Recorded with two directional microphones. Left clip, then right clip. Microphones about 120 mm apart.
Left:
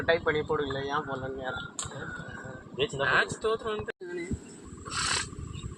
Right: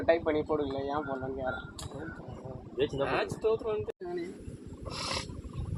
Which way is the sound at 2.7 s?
65° right (ahead or behind).